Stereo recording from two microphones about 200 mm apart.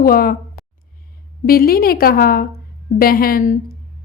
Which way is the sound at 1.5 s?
50° left (ahead or behind).